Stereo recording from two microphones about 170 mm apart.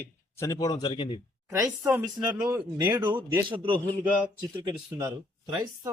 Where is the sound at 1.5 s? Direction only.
20° right (ahead or behind).